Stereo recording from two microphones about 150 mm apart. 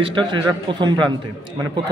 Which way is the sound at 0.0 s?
35° right (ahead or behind).